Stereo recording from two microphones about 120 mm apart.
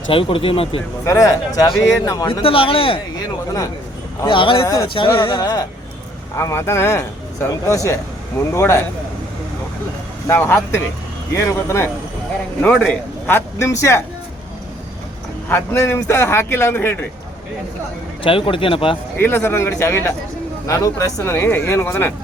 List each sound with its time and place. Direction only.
0.1 s speech: 50° left (ahead or behind)
1.0 s a man's voice: 25° left (ahead or behind)
2.2 s speech: 50° left (ahead or behind)
4.3 s speech: 45° left (ahead or behind)
4.6 s a man's voice: 25° left (ahead or behind)
4.9 s speech: 45° left (ahead or behind)
6.3 s a man's voice: 20° left (ahead or behind)
10.2 s a man's voice: 20° left (ahead or behind)
12.6 s a man's voice: 5° left (ahead or behind)
13.2 s a man's voice: 20° left (ahead or behind)
15.4 s a man's voice: 20° left (ahead or behind)
18.2 s speech: 45° left (ahead or behind)
19.1 s a man's voice: 20° left (ahead or behind)